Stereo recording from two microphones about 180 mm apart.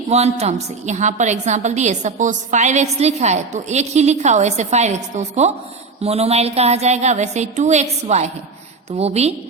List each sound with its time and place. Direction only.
0.1 s a woman's voice: 35° right (ahead or behind)